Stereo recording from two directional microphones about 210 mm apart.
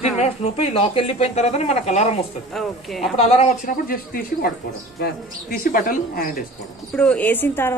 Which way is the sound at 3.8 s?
45° left (ahead or behind).